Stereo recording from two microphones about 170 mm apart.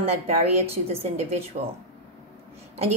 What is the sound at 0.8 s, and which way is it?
Speech, 40° right (ahead or behind).